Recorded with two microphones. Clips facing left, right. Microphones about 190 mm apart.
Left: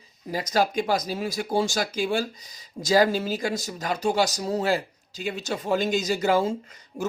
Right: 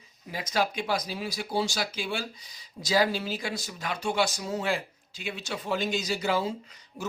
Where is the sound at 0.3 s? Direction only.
40° left (ahead or behind).